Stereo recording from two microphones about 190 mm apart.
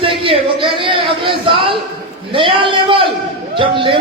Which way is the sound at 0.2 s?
30° right (ahead or behind).